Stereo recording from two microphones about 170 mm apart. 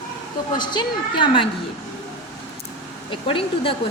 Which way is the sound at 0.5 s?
25° left (ahead or behind).